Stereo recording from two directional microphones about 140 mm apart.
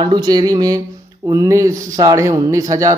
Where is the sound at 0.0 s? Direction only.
30° right (ahead or behind).